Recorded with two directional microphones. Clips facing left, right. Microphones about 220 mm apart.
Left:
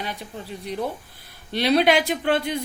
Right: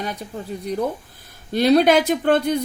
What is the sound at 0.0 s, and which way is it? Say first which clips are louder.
A woman's voice: right 4 dB; 45° right (ahead or behind).